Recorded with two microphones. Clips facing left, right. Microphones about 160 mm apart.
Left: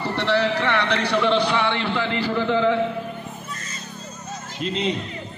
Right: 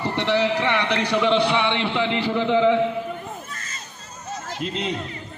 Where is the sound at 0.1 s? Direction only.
15° right (ahead or behind).